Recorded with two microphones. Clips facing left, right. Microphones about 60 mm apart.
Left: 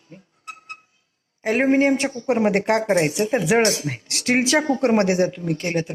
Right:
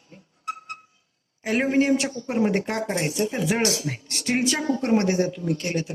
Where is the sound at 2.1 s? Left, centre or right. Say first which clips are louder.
Left 4 dB; left.